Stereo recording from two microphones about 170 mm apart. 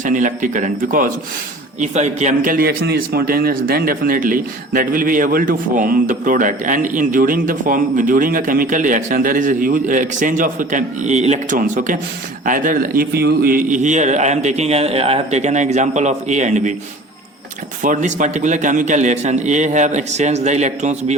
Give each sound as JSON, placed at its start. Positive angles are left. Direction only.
{"t": 0.0, "sound": "a man's voice", "side_deg": -50}
{"t": 1.8, "sound": "a man's voice", "side_deg": -40}
{"t": 17.8, "sound": "a man's voice", "side_deg": -45}